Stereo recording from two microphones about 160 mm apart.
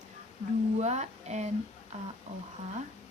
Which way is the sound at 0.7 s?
45° right (ahead or behind).